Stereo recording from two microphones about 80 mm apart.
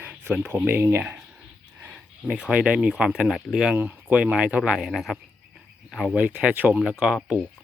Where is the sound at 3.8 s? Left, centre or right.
Centre.